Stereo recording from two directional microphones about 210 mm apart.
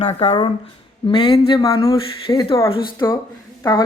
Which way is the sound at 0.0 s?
30° left (ahead or behind).